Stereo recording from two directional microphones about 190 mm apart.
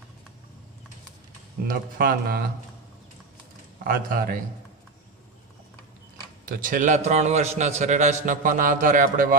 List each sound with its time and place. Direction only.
1.7 s speech: 50° right (ahead or behind)
3.8 s speech: 50° right (ahead or behind)
6.5 s a man's voice: 45° right (ahead or behind)